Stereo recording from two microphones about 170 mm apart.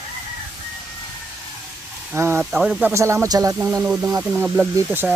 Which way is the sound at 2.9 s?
15° right (ahead or behind).